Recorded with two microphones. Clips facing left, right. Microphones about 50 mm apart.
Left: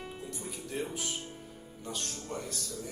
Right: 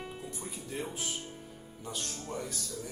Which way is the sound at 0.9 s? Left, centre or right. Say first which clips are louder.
Left 1 dB; centre.